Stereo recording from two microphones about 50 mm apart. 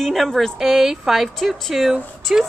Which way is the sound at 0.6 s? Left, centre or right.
Centre.